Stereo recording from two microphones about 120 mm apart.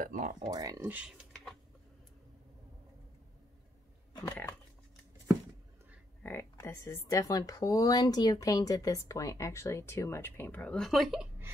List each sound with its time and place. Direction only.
0.0 s speech: 90° right
0.5 s speech: 30° right (ahead or behind)
0.8 s speech: 15° right (ahead or behind)
4.3 s a sound: 20° left (ahead or behind)
6.2 s speech: 20° left (ahead or behind); by 11.2 s centre (ahead or behind)